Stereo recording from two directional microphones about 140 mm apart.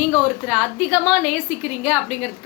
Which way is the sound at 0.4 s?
5° right (ahead or behind).